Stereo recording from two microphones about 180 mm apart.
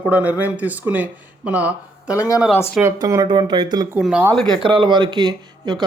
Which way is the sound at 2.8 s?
15° right (ahead or behind).